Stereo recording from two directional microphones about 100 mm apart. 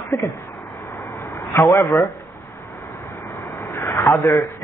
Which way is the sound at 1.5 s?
35° left (ahead or behind).